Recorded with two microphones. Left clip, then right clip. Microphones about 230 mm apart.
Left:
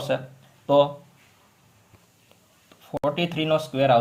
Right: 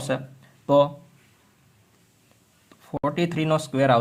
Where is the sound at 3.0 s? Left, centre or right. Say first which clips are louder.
Even; right.